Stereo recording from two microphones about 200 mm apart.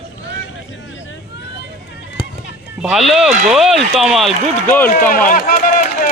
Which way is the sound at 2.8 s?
Centre (ahead or behind).